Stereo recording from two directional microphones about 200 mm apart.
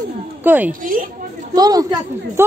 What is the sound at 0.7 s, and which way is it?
Speech, 45° right (ahead or behind).